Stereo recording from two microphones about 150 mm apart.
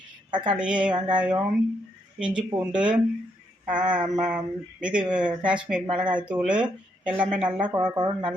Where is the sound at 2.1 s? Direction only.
5° right (ahead or behind).